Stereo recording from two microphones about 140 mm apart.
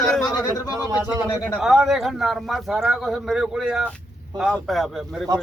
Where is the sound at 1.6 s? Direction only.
5° right (ahead or behind).